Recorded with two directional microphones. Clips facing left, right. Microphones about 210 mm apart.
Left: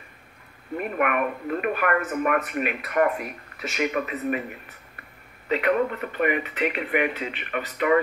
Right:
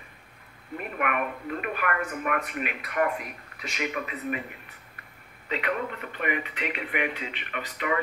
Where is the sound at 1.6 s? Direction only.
45° left (ahead or behind).